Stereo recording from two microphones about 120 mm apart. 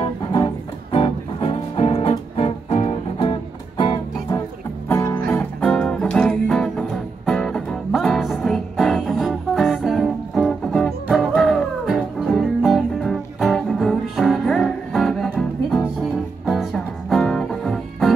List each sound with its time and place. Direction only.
0.9 s music: 45° left (ahead or behind)
4.8 s music: 20° left (ahead or behind); by 18.1 s 5° left (ahead or behind)